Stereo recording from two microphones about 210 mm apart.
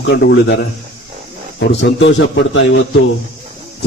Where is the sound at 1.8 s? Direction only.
60° left (ahead or behind).